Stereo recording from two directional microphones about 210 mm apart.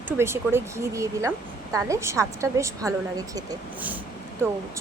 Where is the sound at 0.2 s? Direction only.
10° right (ahead or behind).